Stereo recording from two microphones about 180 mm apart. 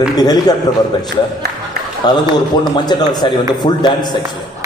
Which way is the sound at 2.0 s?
25° left (ahead or behind).